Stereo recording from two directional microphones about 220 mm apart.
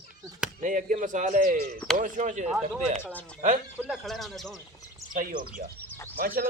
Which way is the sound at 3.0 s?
5° left (ahead or behind).